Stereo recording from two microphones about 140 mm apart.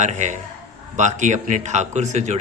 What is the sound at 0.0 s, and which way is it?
A man's voice, 60° right (ahead or behind).